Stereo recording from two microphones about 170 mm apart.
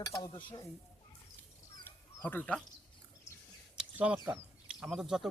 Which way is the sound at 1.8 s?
10° left (ahead or behind).